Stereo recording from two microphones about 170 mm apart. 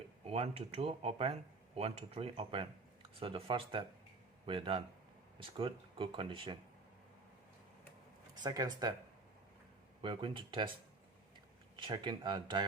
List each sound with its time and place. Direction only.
0.3 s speech: 35° right (ahead or behind)
8.4 s speech: 25° right (ahead or behind)
10.0 s speech: 30° right (ahead or behind)
11.8 s speech: 25° right (ahead or behind)